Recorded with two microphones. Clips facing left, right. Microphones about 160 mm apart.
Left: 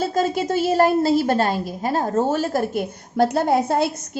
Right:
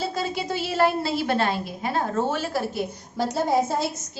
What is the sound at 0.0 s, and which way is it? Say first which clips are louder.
A woman's voice: left 7 dB; 45° left (ahead or behind).